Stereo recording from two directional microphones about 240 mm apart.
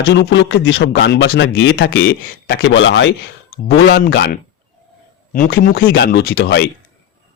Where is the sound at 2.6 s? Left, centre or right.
Left.